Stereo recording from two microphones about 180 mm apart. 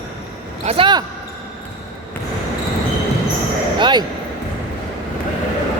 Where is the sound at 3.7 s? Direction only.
25° right (ahead or behind).